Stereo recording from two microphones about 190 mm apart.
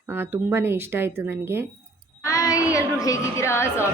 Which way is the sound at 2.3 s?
15° left (ahead or behind).